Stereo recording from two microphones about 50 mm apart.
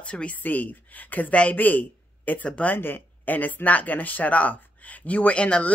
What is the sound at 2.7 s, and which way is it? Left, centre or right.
Speech, left.